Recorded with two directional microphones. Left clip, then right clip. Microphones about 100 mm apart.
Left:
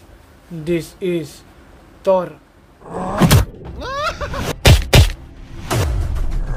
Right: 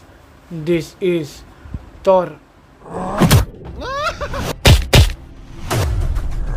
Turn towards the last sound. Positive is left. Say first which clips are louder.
# even
turn(degrees=0)  # may be behind; listen again after turning